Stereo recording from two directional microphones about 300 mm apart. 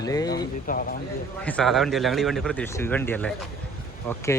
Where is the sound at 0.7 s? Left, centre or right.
Left.